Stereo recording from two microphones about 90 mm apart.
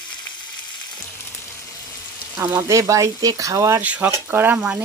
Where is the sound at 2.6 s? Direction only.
35° right (ahead or behind).